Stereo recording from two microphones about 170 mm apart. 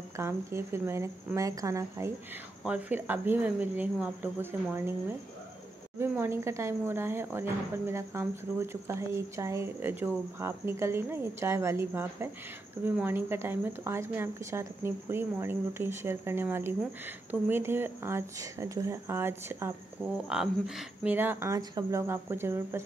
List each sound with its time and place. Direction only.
0.2 s speech: 15° right (ahead or behind)